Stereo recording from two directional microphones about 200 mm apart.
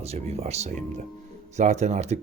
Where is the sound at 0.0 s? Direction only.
30° right (ahead or behind).